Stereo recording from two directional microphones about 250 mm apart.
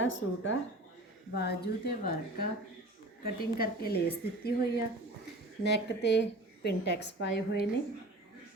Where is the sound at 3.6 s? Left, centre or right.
Left.